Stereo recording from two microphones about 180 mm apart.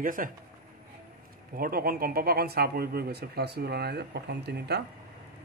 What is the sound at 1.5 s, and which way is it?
Speech, 55° right (ahead or behind).